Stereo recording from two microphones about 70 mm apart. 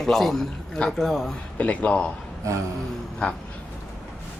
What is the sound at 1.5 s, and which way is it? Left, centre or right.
Speech, centre.